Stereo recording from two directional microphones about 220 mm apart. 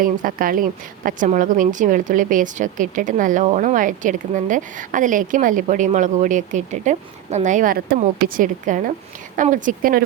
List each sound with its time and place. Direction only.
0.0 s a woman's voice: 40° right (ahead or behind)